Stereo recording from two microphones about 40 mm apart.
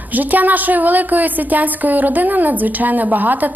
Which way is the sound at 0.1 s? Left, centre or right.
Right.